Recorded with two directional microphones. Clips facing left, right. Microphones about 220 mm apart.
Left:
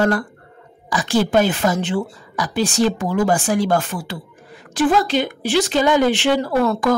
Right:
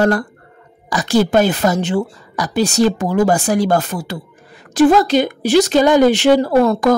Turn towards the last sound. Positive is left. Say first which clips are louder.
# right 5 dB
turn(degrees=-40)  # may be behind; listen again after turning